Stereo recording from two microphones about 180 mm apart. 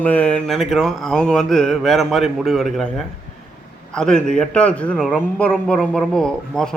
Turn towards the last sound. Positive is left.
turn(degrees=5)  # may be behind; listen again after turning